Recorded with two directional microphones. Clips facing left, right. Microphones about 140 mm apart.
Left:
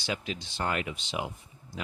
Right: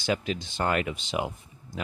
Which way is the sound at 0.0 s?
50° right (ahead or behind).